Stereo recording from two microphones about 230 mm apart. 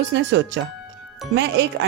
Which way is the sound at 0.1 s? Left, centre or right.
Right.